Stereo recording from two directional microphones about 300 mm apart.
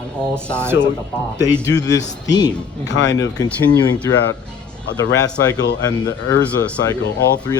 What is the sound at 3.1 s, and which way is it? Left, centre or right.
Speech, centre.